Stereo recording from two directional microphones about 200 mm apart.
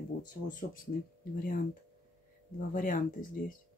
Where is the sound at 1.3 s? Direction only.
45° left (ahead or behind).